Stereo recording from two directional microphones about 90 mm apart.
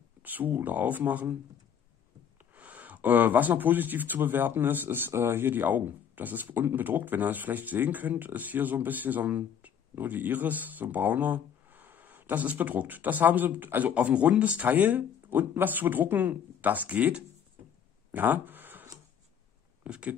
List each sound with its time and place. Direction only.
0.2 s speech: 20° right (ahead or behind)
2.5 s speech: 15° right (ahead or behind)
18.1 s a sound: 20° right (ahead or behind)
19.8 s speech: 15° right (ahead or behind)